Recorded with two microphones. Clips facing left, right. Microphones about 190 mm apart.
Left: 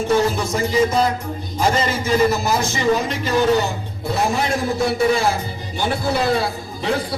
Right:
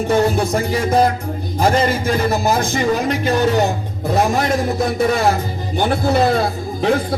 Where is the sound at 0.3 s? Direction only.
55° right (ahead or behind).